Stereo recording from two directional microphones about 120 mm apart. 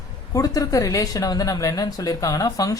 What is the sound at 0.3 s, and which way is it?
Speech, 30° left (ahead or behind).